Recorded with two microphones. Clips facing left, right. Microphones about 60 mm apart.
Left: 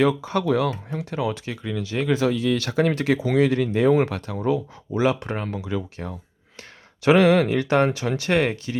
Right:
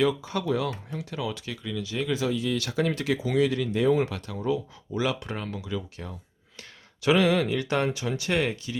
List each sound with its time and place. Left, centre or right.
0.0 s speech: left
4.9 s speech: left